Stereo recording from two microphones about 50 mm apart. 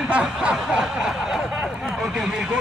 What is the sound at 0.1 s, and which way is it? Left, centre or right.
Snicker, right.